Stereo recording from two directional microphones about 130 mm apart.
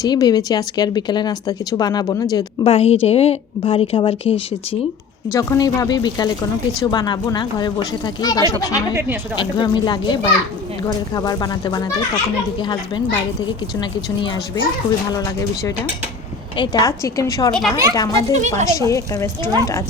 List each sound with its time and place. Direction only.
0.0 s speech: 30° left (ahead or behind)
2.6 s a woman's voice: 50° left (ahead or behind)
5.3 s a woman's voice: 25° left (ahead or behind)
13.7 s speech: 30° left (ahead or behind)
16.6 s a woman's voice: 30° left (ahead or behind)
17.5 s speech: centre (ahead or behind)
17.9 s a woman's voice: 30° left (ahead or behind)
18.3 s a woman's voice: 65° right (ahead or behind)
18.7 s a woman's voice: 25° left (ahead or behind)